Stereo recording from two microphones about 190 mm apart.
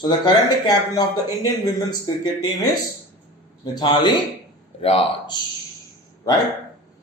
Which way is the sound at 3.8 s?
25° left (ahead or behind).